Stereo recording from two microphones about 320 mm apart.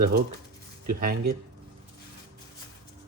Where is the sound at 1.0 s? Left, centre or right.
Right.